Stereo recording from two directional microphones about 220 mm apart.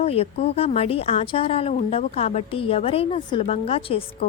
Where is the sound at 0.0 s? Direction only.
25° left (ahead or behind).